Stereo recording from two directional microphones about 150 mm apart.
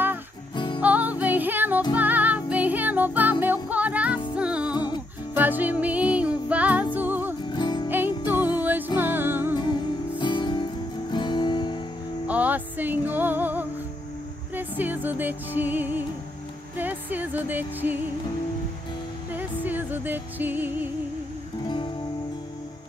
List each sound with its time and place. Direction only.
0.7 s music: 10° right (ahead or behind)
4.7 s music: 30° left (ahead or behind)
5.3 s music: 10° right (ahead or behind)
7.4 s music: 30° left (ahead or behind)
8.5 s music: 10° right (ahead or behind)
9.6 s music: 30° left (ahead or behind)
12.3 s music: 10° right (ahead or behind)
19.3 s music: 10° right (ahead or behind)
21.6 s music: 30° left (ahead or behind)